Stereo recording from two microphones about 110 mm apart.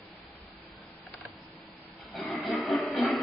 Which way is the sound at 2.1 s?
Centre (ahead or behind).